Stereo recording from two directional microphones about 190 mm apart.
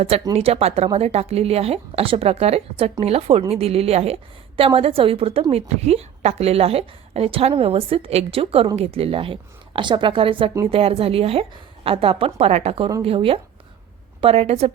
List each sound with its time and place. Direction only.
0.3 s a woman's voice: 30° right (ahead or behind)